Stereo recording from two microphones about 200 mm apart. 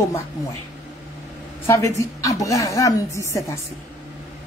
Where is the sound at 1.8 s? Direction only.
15° left (ahead or behind).